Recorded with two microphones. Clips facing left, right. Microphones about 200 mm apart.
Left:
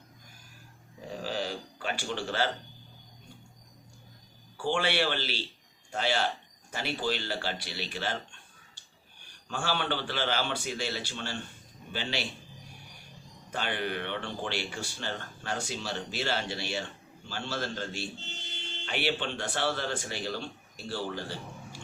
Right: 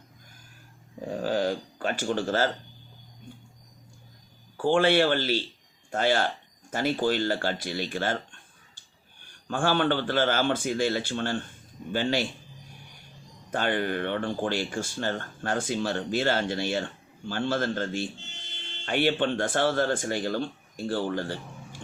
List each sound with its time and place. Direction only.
1.1 s speech: 50° right (ahead or behind)
4.5 s speech: 50° right (ahead or behind)
13.5 s speech: 50° right (ahead or behind)